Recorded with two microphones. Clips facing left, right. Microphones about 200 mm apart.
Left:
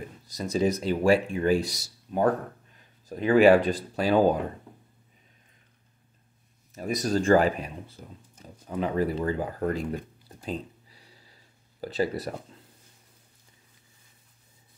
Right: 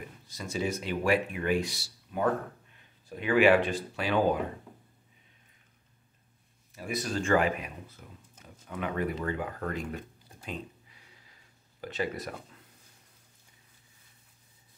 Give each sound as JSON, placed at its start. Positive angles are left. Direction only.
{"t": 0.3, "sound": "speech", "side_deg": 40}
{"t": 6.7, "sound": "speech", "side_deg": 40}